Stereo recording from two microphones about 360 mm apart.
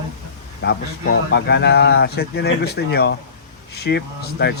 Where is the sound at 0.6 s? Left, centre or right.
Left.